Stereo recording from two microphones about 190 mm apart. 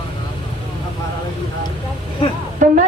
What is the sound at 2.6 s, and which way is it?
Speech, 40° right (ahead or behind).